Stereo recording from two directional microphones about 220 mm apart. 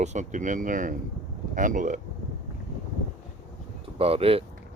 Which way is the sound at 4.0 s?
25° right (ahead or behind).